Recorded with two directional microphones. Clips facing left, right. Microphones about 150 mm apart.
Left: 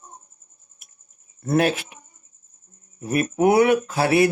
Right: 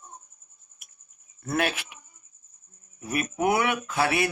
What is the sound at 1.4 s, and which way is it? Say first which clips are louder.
Speech: left 7 dB; 35° left (ahead or behind).